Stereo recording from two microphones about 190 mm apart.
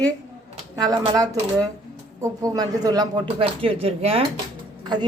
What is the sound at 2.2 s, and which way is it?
A woman's voice, 15° right (ahead or behind).